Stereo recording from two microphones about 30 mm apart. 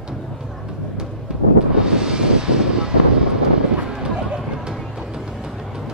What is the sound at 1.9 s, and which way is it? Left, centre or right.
Vehicle, right.